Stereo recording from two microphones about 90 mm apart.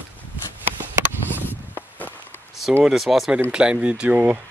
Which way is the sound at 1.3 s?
20° left (ahead or behind).